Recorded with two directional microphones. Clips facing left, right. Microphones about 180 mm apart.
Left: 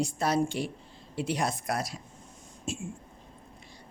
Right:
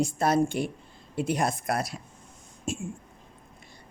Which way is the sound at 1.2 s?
50° right (ahead or behind).